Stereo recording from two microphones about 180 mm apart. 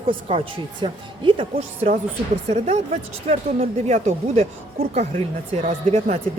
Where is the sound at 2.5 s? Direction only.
40° right (ahead or behind).